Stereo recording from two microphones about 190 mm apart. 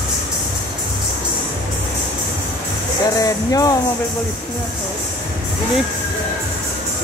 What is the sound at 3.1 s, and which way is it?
Speech, 20° left (ahead or behind).